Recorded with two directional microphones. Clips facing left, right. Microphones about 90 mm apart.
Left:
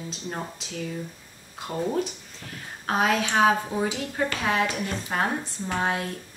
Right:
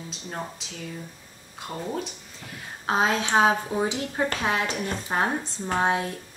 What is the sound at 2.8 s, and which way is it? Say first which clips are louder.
Speech: even; 25° right (ahead or behind).